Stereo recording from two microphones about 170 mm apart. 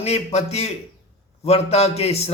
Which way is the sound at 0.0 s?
40° left (ahead or behind).